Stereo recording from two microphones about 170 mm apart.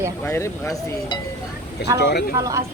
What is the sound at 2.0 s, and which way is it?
Speech, 75° left (ahead or behind).